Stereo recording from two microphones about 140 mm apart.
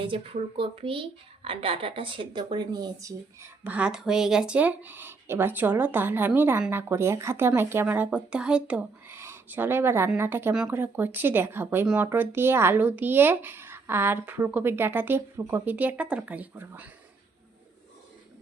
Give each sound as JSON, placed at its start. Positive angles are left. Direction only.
{"t": 0.0, "sound": "a woman's voice", "side_deg": -40}
{"t": 3.6, "sound": "speech", "side_deg": -10}